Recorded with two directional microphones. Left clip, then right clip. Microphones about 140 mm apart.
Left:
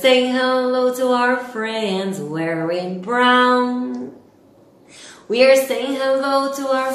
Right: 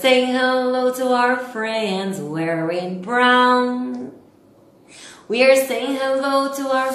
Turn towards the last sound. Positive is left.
turn(degrees=-15)  # may be behind; listen again after turning